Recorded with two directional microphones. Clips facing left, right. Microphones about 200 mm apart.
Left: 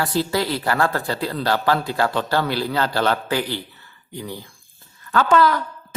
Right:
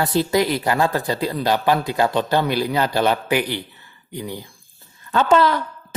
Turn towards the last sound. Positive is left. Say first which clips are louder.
# right 1 dB
turn(degrees=-25)  # may be behind; listen again after turning